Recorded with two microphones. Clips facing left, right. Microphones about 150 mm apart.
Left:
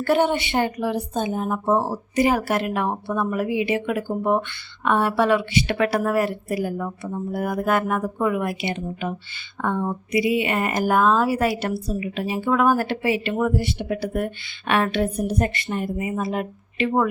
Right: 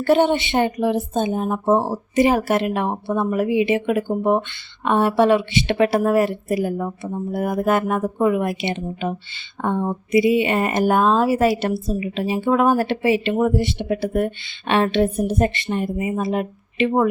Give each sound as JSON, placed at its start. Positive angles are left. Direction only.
{"t": 0.0, "sound": "a woman's voice", "side_deg": -25}